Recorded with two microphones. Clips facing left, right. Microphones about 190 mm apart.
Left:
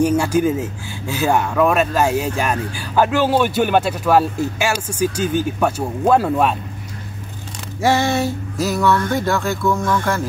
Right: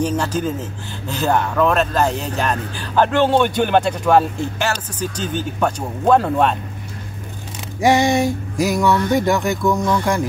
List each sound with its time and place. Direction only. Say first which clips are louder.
0.0 s speech: left 4 dB; 10° left (ahead or behind)
7.8 s speech: right 2 dB; 15° right (ahead or behind)